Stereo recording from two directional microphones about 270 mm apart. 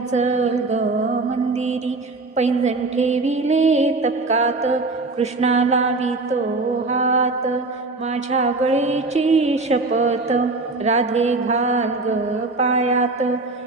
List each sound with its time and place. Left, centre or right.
0.1 s music: right